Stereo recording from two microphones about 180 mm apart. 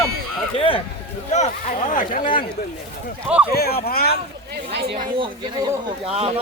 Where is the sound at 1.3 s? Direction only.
45° left (ahead or behind).